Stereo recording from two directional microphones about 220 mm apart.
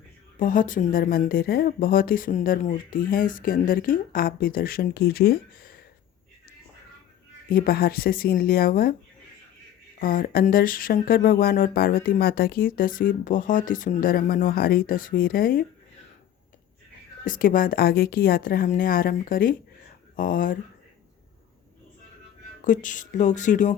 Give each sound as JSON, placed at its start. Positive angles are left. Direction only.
{"t": 0.3, "sound": "speech", "side_deg": 35}
{"t": 7.5, "sound": "speech", "side_deg": 40}
{"t": 10.0, "sound": "speech", "side_deg": 40}
{"t": 17.2, "sound": "speech", "side_deg": 40}
{"t": 22.6, "sound": "speech", "side_deg": 35}